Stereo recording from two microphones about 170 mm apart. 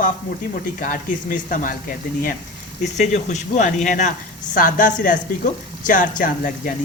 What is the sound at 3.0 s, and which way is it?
A woman's voice, 45° left (ahead or behind).